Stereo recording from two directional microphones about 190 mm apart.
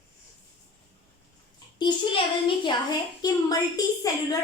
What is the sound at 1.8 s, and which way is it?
A child's voice, 25° left (ahead or behind).